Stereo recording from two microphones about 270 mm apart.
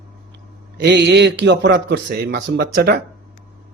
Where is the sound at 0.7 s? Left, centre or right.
Right.